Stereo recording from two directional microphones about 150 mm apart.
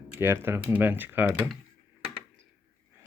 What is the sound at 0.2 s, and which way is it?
Speech, 15° right (ahead or behind).